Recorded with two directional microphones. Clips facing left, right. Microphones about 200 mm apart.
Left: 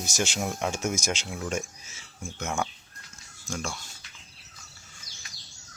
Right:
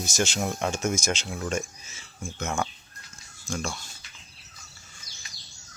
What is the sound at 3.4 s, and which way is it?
Speech, 10° left (ahead or behind).